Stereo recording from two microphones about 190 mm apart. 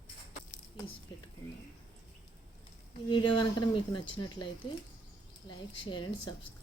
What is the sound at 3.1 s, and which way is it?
Speech, 25° left (ahead or behind).